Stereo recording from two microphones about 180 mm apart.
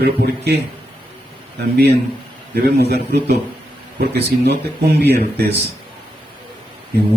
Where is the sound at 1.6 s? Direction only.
60° right (ahead or behind).